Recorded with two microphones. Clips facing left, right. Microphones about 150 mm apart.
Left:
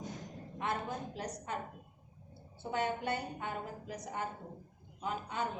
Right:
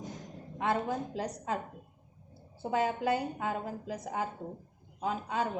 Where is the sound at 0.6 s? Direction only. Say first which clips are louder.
Right 6 dB; 90° right.